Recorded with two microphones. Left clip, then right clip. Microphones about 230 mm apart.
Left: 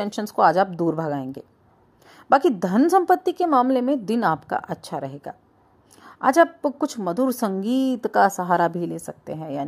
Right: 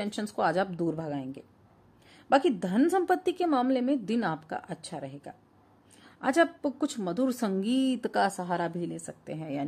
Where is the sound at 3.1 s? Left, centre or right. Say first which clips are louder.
Left 8 dB; centre.